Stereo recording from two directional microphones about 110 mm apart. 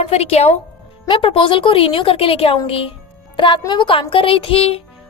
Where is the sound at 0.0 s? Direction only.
70° left (ahead or behind).